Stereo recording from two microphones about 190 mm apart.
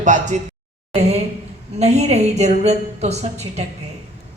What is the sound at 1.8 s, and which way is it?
A woman's voice, 35° right (ahead or behind).